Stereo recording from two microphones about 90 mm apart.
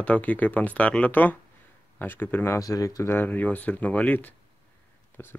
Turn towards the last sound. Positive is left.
turn(degrees=15)  # may be behind; listen again after turning